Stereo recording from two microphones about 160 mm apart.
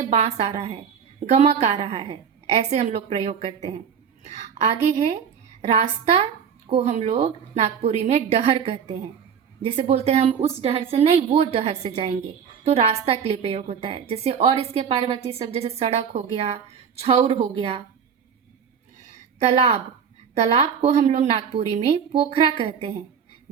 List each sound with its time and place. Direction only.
0.1 s a woman's voice: 45° right (ahead or behind)
6.7 s a woman's voice: 40° right (ahead or behind)
19.4 s a woman's voice: 45° right (ahead or behind)